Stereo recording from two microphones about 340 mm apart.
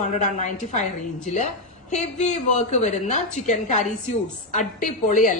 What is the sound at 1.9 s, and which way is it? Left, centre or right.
A woman's voice, left.